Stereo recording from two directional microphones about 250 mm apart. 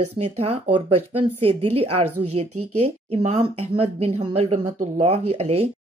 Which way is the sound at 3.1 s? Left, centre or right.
Right.